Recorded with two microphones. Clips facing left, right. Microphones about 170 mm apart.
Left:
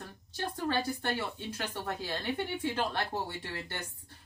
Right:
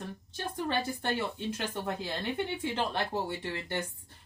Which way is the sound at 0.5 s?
20° right (ahead or behind).